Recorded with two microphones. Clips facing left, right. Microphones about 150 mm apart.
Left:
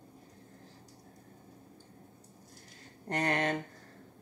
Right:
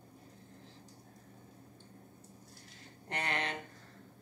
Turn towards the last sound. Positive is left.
turn(degrees=45)  # may be behind; listen again after turning